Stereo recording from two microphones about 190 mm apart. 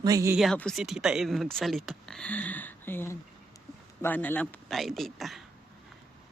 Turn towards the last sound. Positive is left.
turn(degrees=0)  # may be behind; listen again after turning